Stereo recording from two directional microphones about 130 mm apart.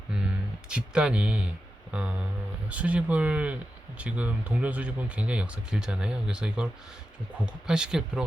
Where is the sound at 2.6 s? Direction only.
10° right (ahead or behind).